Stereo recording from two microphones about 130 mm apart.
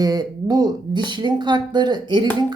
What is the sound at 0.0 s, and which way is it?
Speech, 30° right (ahead or behind).